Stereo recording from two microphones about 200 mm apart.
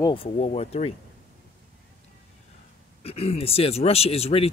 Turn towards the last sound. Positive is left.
turn(degrees=30)  # may be behind; listen again after turning